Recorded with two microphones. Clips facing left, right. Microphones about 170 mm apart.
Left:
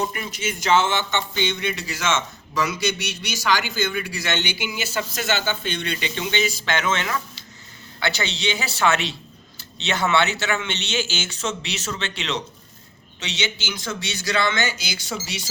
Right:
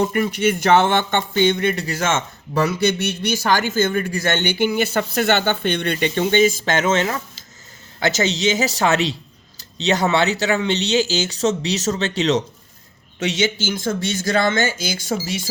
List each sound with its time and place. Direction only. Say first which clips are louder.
0.0 s speech: right 9 dB; 55° right (ahead or behind)
13.1 s speech: right 9 dB; 50° right (ahead or behind)